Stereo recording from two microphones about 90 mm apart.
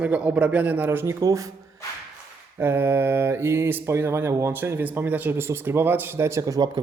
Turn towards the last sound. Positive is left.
turn(degrees=-40)  # may be behind; listen again after turning